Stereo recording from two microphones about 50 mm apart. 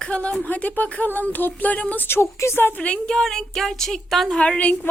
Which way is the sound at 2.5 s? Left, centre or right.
Left.